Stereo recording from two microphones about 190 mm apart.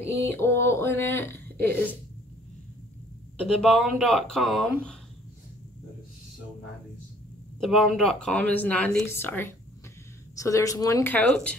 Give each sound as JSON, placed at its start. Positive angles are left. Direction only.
{"t": 0.0, "sound": "speech", "side_deg": 10}
{"t": 3.6, "sound": "speech", "side_deg": 0}
{"t": 7.6, "sound": "speech", "side_deg": 0}